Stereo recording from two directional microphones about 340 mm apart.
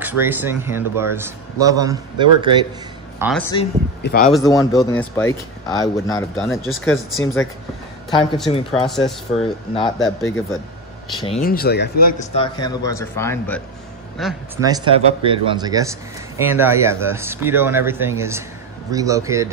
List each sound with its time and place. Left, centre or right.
0.0 s speech: centre
3.2 s speech: centre
4.0 s speech: left
4.3 s speech: centre
6.5 s a woman's voice: centre
8.8 s speech: centre
9.3 s speech: centre
11.4 s speech: left
12.2 s speech: centre
14.6 s speech: centre